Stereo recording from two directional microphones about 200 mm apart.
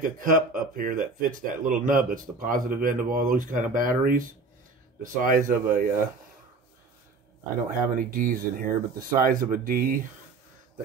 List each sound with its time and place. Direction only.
0.0 s speech: 40° right (ahead or behind)
7.9 s speech: 45° right (ahead or behind)